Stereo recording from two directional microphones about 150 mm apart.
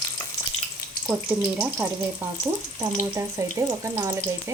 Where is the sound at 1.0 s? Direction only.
10° right (ahead or behind).